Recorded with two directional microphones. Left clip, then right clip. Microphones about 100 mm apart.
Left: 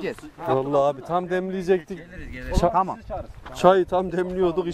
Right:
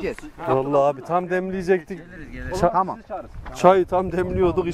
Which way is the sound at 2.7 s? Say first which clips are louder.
Right 1 dB; 25° left (ahead or behind).